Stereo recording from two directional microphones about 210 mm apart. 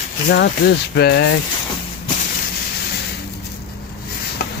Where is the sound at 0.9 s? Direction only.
50° left (ahead or behind).